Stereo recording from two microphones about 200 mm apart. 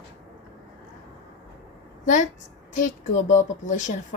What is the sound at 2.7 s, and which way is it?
A woman's voice, 35° left (ahead or behind).